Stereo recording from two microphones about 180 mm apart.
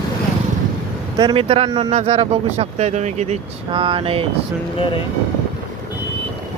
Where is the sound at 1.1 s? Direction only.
25° right (ahead or behind).